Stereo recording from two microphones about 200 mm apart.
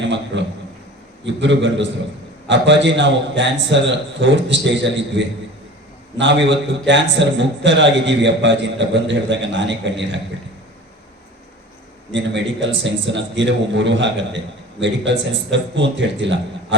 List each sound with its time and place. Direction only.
0.0 s a sound: 65° right (ahead or behind)
1.2 s a man's voice: 65° right (ahead or behind)
12.1 s a man's voice: 65° right (ahead or behind)